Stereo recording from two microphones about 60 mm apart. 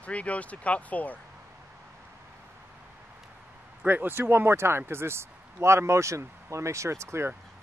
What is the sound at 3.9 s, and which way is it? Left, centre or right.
Speech, right.